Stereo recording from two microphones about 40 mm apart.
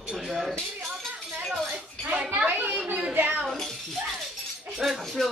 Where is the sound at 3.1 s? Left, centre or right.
Right.